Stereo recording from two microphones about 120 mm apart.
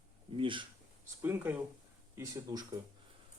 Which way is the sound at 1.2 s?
15° right (ahead or behind).